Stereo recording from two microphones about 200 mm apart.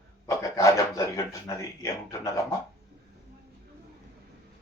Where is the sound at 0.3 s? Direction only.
15° left (ahead or behind).